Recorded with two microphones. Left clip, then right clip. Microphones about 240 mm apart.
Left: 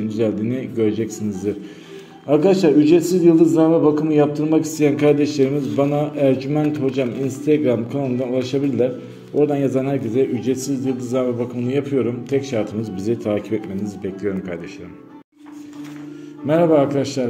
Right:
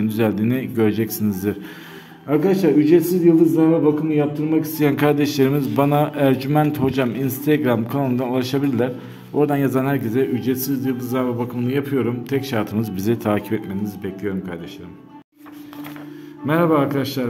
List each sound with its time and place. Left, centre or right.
0.1 s a man's voice: right
2.3 s a man's voice: centre
3.3 s a sound: centre
4.7 s a man's voice: centre
16.4 s a man's voice: centre